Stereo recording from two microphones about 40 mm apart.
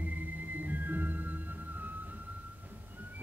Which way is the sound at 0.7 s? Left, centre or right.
Right.